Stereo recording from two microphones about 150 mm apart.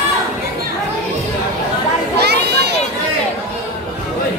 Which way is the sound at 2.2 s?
90° right.